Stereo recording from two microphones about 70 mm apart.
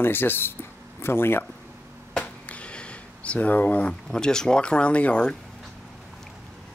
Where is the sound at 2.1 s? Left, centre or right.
Centre.